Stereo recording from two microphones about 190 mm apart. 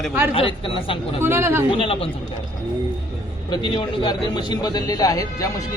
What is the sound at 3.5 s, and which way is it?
A man's voice, 25° left (ahead or behind).